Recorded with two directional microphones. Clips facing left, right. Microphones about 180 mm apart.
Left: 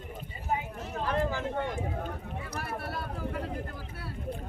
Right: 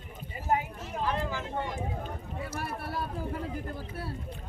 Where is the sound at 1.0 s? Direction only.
50° left (ahead or behind).